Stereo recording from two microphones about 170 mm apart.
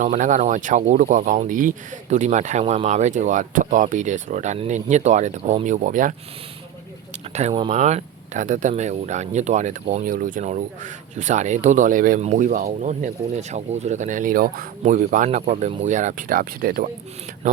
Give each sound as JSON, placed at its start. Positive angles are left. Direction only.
{"t": 0.0, "sound": "speech", "side_deg": -50}
{"t": 7.3, "sound": "speech", "side_deg": -35}